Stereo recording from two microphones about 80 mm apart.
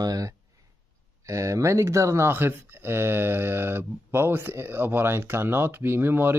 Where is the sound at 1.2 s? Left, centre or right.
Right.